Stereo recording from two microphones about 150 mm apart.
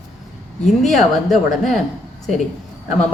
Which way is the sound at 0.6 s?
Centre (ahead or behind).